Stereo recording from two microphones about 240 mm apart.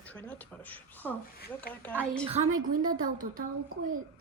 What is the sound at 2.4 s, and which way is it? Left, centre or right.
Speech, right.